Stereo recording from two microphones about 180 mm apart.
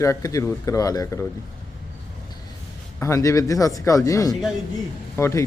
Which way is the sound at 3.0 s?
15° left (ahead or behind).